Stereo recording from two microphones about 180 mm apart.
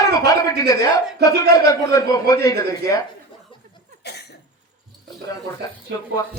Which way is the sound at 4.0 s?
65° left (ahead or behind).